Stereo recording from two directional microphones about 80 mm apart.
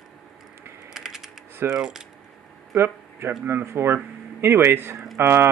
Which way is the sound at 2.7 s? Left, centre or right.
Right.